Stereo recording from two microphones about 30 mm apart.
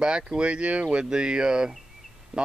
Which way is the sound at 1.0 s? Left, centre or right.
Right.